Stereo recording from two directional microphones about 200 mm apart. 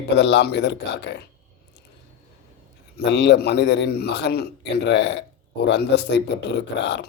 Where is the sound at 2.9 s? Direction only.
60° left (ahead or behind).